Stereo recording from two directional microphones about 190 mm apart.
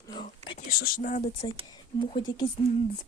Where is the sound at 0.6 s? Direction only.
50° left (ahead or behind).